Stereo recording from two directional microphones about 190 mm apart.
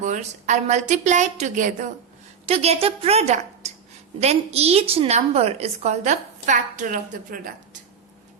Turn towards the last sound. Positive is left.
turn(degrees=-45)  # may be behind; listen again after turning